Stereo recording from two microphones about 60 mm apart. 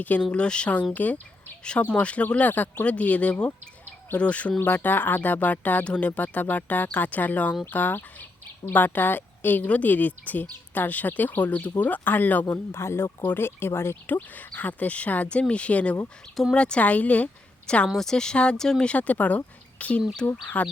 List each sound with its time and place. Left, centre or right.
0.2 s speech: centre
4.6 s a woman's voice: left
12.7 s a woman's voice: left
14.1 s speech: left
16.3 s speech: centre
16.6 s speech: centre
17.8 s speech: centre
18.9 s speech: left